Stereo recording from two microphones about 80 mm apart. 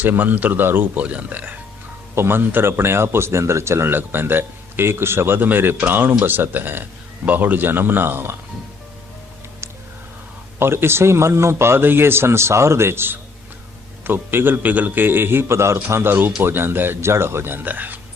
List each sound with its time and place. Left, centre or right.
0.0 s speech: right
10.6 s a man's voice: right